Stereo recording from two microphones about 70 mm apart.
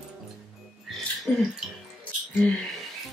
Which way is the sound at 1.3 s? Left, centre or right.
Centre.